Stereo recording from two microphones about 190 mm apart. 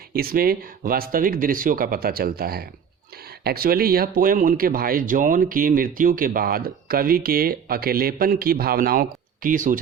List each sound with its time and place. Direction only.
0.1 s speech: 50° right (ahead or behind)